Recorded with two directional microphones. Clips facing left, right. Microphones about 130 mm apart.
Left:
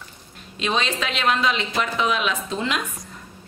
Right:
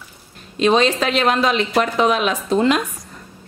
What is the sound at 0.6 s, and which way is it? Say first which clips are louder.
A woman's voice: right 9 dB; 45° right (ahead or behind).